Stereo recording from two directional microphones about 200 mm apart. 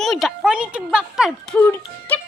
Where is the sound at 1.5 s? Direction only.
10° left (ahead or behind).